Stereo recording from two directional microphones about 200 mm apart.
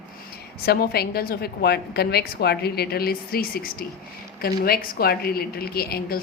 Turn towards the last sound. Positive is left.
turn(degrees=50)  # may be behind; listen again after turning